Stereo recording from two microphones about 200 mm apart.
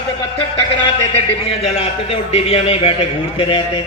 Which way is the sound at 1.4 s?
30° left (ahead or behind).